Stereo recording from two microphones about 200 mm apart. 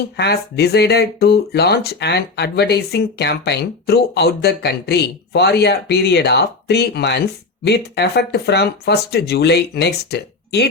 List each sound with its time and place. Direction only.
0.2 s speech: 55° left (ahead or behind)